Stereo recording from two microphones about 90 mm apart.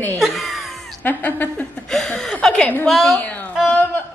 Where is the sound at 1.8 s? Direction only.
5° left (ahead or behind).